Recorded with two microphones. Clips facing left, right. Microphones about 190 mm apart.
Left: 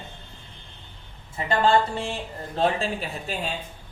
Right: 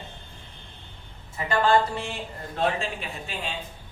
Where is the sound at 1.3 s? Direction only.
25° left (ahead or behind).